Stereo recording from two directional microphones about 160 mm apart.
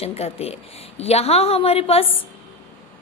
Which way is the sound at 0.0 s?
40° left (ahead or behind).